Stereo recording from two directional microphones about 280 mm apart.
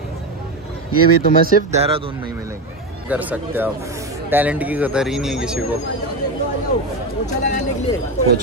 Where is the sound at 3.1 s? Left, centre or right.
Centre.